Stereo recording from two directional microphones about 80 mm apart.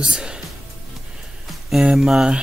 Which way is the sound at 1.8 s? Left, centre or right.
Centre.